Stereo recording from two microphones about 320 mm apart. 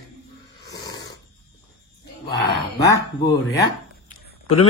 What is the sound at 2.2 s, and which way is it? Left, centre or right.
Speech, left.